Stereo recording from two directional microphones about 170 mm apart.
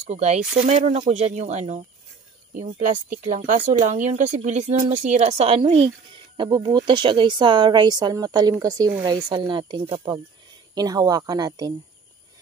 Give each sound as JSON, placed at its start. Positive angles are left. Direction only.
{"t": 0.0, "sound": "speech", "side_deg": -40}
{"t": 0.4, "sound": "speech", "side_deg": -5}
{"t": 0.7, "sound": "speech", "side_deg": -45}
{"t": 2.8, "sound": "speech", "side_deg": -45}